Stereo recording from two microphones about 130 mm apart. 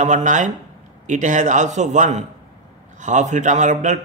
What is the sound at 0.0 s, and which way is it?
Speech, 70° right (ahead or behind).